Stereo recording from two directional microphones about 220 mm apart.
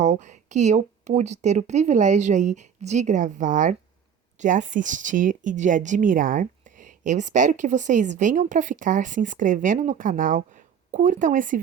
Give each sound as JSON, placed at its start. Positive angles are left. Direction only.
{"t": 0.0, "sound": "speech", "side_deg": -30}